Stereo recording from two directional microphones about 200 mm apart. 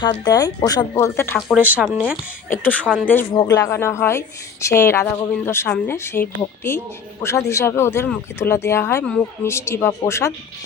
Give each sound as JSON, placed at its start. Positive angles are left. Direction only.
{"t": 0.3, "sound": "speech", "side_deg": 20}
{"t": 1.4, "sound": "speech", "side_deg": 0}
{"t": 3.4, "sound": "speech", "side_deg": 15}